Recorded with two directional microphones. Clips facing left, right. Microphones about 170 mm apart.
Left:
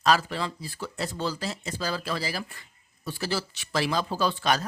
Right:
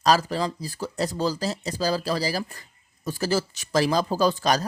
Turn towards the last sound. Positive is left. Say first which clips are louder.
# right 4 dB
turn(degrees=-40)  # may be behind; listen again after turning